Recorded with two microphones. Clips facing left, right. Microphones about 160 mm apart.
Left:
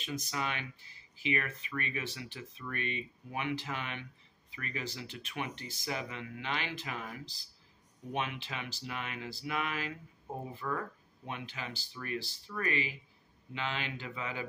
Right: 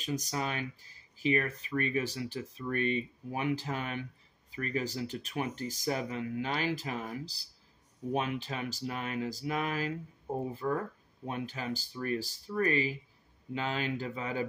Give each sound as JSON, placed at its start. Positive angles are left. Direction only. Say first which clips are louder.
{"t": 0.0, "sound": "speech", "louder": "right 3 dB", "side_deg": -40}